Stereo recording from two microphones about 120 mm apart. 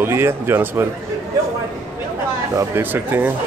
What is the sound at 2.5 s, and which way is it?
Speech, 15° right (ahead or behind).